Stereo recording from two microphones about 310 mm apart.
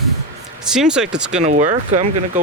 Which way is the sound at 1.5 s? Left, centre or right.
Right.